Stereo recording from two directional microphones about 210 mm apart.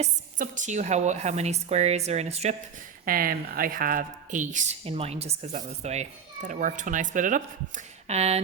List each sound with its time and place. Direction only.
0.0 s a woman's voice: 35° right (ahead or behind)
3.1 s a woman's voice: 45° right (ahead or behind)